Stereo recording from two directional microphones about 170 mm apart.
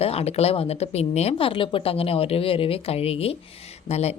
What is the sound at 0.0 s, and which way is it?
A woman's voice, 35° left (ahead or behind).